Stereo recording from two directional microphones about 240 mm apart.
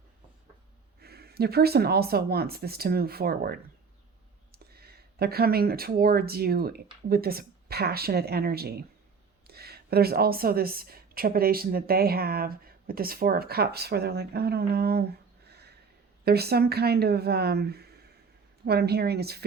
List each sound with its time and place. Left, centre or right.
1.0 s a woman's voice: right
15.4 s a sound: right
16.2 s a woman's voice: right